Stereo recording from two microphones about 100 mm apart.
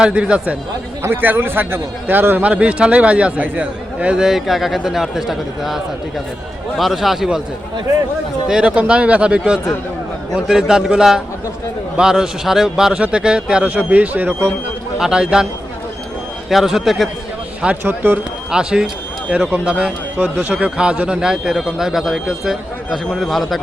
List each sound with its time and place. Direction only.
0.0 s a man's voice: 10° right (ahead or behind)
8.4 s a man's voice: 10° right (ahead or behind)
9.4 s a man's voice: centre (ahead or behind); by 14.5 s 20° right (ahead or behind)
14.9 s a man's voice: 5° right (ahead or behind)
16.5 s a man's voice: centre (ahead or behind)
17.8 s speech: 20° right (ahead or behind)
18.5 s a man's voice: 10° right (ahead or behind)